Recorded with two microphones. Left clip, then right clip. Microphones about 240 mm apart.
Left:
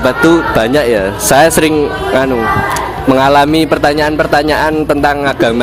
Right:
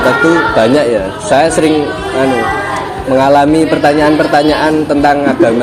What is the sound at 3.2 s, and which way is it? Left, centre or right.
A man's voice, left.